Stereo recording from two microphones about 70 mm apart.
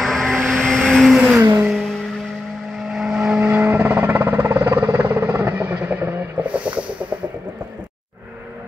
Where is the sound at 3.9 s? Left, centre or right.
Right.